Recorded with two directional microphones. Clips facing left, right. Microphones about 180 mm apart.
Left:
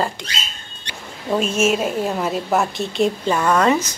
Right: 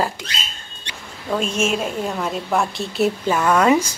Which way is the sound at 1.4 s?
5° left (ahead or behind).